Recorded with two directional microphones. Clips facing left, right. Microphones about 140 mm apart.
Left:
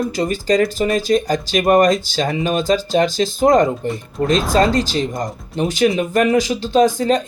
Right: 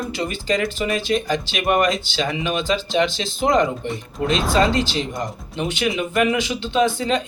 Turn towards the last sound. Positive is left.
turn(degrees=40)  # may be behind; listen again after turning